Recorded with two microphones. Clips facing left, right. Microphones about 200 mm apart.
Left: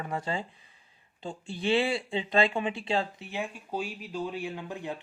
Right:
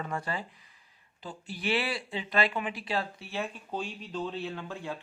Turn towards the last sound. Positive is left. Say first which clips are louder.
# left 1 dB
turn(degrees=15)  # may be behind; listen again after turning